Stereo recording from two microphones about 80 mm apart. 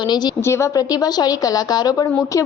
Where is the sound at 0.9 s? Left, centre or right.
Left.